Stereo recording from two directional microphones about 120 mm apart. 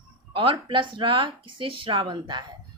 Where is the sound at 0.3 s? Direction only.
45° right (ahead or behind).